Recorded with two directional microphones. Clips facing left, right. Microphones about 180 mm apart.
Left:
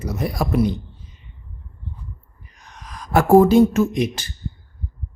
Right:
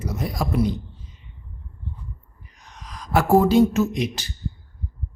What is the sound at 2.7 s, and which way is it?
Speech, 50° left (ahead or behind).